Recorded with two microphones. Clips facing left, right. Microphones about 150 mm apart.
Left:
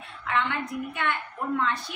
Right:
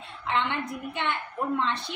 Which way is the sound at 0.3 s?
25° right (ahead or behind).